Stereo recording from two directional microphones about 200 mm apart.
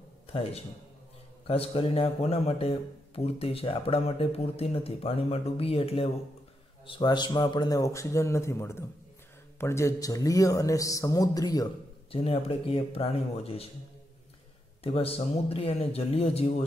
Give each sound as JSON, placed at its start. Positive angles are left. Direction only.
{"t": 0.3, "sound": "a man's voice", "side_deg": 30}
{"t": 14.8, "sound": "speech", "side_deg": 30}